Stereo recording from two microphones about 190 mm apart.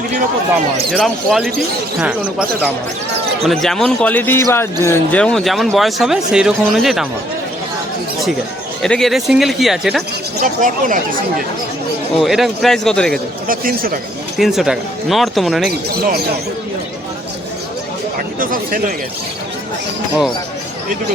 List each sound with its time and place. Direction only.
0.9 s a man's voice: centre (ahead or behind)
5.2 s speech: centre (ahead or behind)
8.8 s speech: centre (ahead or behind)
10.4 s speech: 45° right (ahead or behind)
12.1 s speech: centre (ahead or behind)
13.5 s speech: 50° right (ahead or behind)
14.3 s speech: centre (ahead or behind)
18.3 s speech: 45° right (ahead or behind)